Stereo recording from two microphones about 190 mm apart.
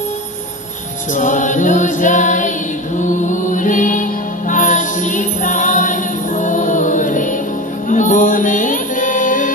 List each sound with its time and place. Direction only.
1.1 s chant: 40° left (ahead or behind)
3.0 s music: 40° left (ahead or behind)